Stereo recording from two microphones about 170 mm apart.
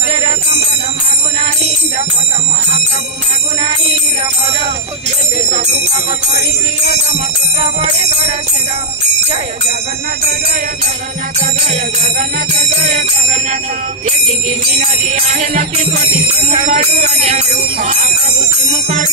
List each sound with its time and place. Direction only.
7.6 s jingle bell: 40° right (ahead or behind)
10.2 s music: 65° right (ahead or behind); by 19.0 s 45° right (ahead or behind)